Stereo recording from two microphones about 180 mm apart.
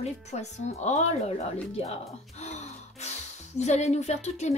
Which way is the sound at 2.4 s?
40° left (ahead or behind).